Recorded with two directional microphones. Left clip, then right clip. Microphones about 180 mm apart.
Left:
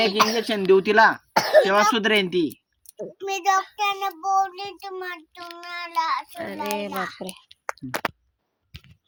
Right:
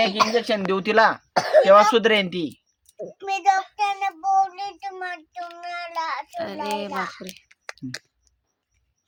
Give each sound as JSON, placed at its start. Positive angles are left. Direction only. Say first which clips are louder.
{"t": 0.2, "sound": "speech", "louder": "left 2 dB", "side_deg": 25}
{"t": 0.5, "sound": "speech", "louder": "left 2 dB", "side_deg": -25}
{"t": 1.3, "sound": "cough", "louder": "even", "side_deg": 20}
{"t": 1.6, "sound": "speech", "louder": "right 5 dB", "side_deg": -25}
{"t": 3.2, "sound": "child singing", "louder": "right 1 dB", "side_deg": 0}
{"t": 7.4, "sound": "a sound", "louder": "left 7 dB", "side_deg": 5}